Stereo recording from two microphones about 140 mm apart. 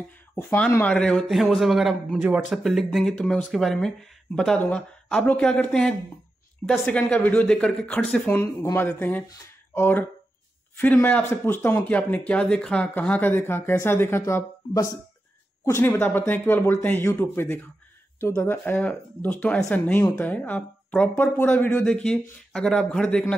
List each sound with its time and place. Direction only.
0.4 s speech: 15° left (ahead or behind)
2.2 s speech: 10° right (ahead or behind)
2.6 s speech: centre (ahead or behind)